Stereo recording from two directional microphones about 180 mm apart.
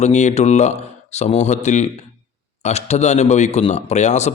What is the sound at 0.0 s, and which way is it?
Speech, 40° left (ahead or behind).